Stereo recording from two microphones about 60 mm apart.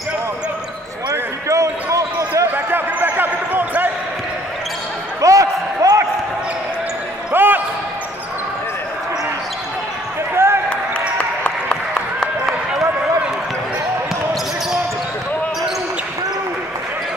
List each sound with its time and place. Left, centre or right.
1.5 s basketball bounce: right
2.5 s basketball bounce: right
5.2 s a sound: right
7.3 s basketball bounce: right
10.3 s basketball bounce: right
10.7 s applause: centre